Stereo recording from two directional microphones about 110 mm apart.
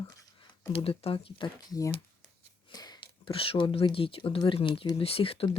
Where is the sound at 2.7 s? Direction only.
35° left (ahead or behind); by 3.8 s 55° left (ahead or behind).